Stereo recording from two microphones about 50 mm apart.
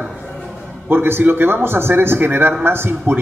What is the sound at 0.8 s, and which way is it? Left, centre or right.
A man's voice, right.